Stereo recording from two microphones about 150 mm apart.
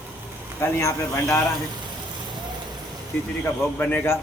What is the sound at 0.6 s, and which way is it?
Speech, 15° left (ahead or behind).